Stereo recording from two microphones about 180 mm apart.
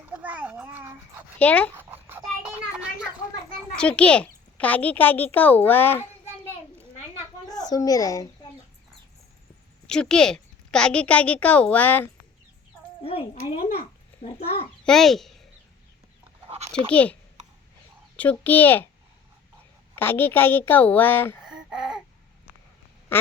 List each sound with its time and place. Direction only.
0.0 s children playing: 10° right (ahead or behind)
1.4 s a woman's voice: 10° left (ahead or behind)
1.7 s a sound: 10° right (ahead or behind)
3.8 s a woman's voice: 5° left (ahead or behind)
7.4 s a child's voice: 20° left (ahead or behind)
9.8 s a woman's voice: 5° left (ahead or behind)
13.0 s a sound: 30° left (ahead or behind)
14.2 s a child's voice: 40° left (ahead or behind)
14.8 s a child's voice: centre (ahead or behind)
16.9 s a woman's voice: 10° left (ahead or behind)
18.2 s a woman's voice: 10° left (ahead or behind)
20.0 s a woman's voice: 10° left (ahead or behind)
21.4 s babbling: 5° right (ahead or behind)